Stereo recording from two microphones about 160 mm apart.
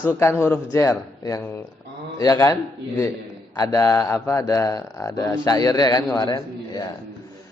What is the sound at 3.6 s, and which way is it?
A man's voice, 20° left (ahead or behind).